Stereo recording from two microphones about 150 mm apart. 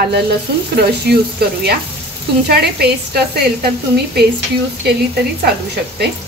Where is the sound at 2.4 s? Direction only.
90° right.